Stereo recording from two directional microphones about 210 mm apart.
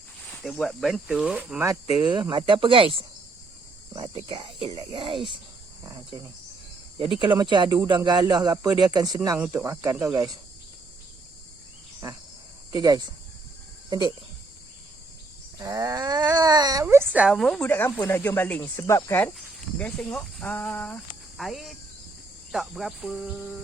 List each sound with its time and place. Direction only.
0.4 s speech: centre (ahead or behind); by 10.3 s 15° right (ahead or behind)
12.7 s speech: 20° right (ahead or behind)
15.5 s cattle: 15° right (ahead or behind)
16.3 s speech: 20° right (ahead or behind); by 23.6 s centre (ahead or behind)